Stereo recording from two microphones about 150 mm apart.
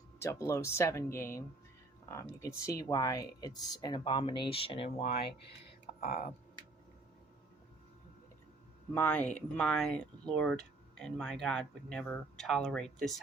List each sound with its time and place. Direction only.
0.2 s speech: 20° left (ahead or behind); by 5.0 s 35° left (ahead or behind)
5.8 s a sound: 90° left
9.0 s speech: 10° left (ahead or behind)